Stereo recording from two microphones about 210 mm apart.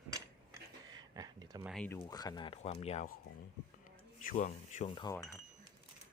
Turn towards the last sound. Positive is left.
turn(degrees=15)  # may be behind; listen again after turning